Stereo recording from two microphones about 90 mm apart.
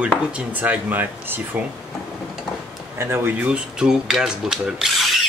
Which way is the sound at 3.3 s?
15° right (ahead or behind).